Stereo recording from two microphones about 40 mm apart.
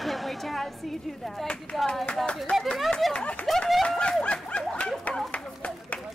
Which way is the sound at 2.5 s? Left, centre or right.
Left.